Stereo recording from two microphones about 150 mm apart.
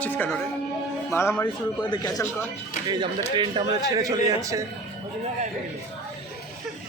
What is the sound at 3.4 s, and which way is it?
A man's voice, 25° right (ahead or behind).